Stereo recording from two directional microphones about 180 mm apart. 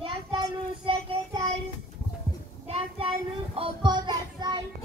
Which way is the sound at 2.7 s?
35° right (ahead or behind).